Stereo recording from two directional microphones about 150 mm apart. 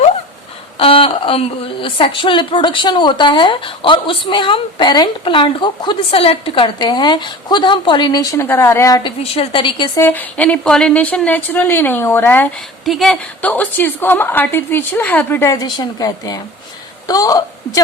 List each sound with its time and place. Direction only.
0.8 s a woman's voice: 35° left (ahead or behind); by 9.0 s 20° left (ahead or behind)
9.0 s a woman's voice: 40° left (ahead or behind)
10.0 s a woman's voice: 10° left (ahead or behind)
12.8 s a woman's voice: centre (ahead or behind)
15.5 s a woman's voice: 25° left (ahead or behind)